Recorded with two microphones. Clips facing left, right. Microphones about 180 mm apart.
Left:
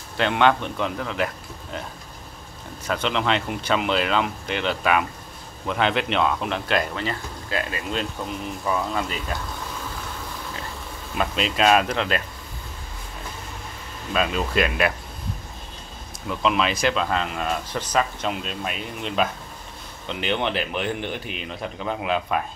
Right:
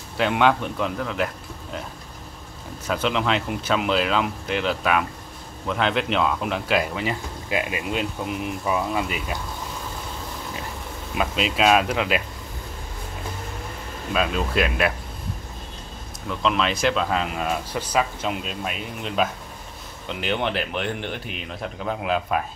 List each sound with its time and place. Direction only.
0.2 s a man's voice: 5° right (ahead or behind)
2.9 s speech: 5° right (ahead or behind)
11.1 s speech: 5° right (ahead or behind)
14.1 s speech: centre (ahead or behind)
16.3 s speech: 5° left (ahead or behind)